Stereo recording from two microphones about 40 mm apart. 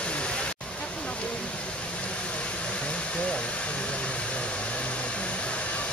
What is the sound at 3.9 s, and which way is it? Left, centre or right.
Vehicle, left.